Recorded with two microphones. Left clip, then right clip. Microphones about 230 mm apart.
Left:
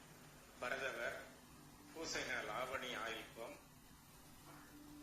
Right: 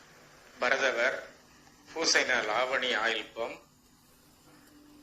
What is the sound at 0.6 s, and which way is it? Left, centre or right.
Speech, right.